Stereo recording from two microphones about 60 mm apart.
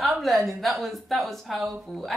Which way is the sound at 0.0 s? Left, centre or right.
Centre.